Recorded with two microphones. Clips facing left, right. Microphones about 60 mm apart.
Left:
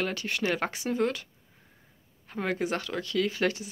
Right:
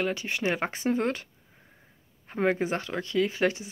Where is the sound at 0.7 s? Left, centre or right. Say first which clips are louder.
Right 1 dB; right.